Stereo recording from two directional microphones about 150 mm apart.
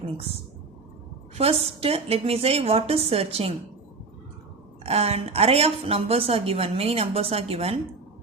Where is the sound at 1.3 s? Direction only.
40° right (ahead or behind).